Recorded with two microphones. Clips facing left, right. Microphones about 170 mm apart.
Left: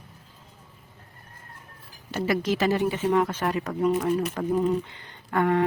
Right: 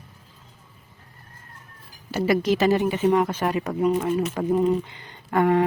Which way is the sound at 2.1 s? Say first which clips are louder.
Right 4 dB; 15° right (ahead or behind).